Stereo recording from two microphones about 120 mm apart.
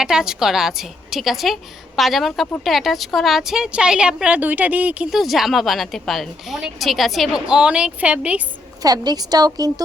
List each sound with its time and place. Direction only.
0.0 s a woman's voice: 5° right (ahead or behind)
5.1 s a woman's voice: centre (ahead or behind)
8.8 s a woman's voice: 30° right (ahead or behind)